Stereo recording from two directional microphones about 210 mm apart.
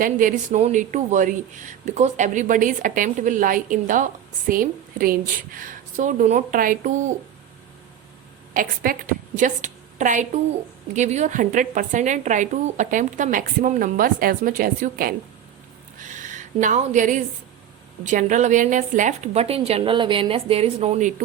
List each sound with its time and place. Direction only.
0.0 s speech: 40° right (ahead or behind)
8.5 s speech: 40° right (ahead or behind)
16.0 s a sound: 35° right (ahead or behind)
18.0 s speech: 35° right (ahead or behind)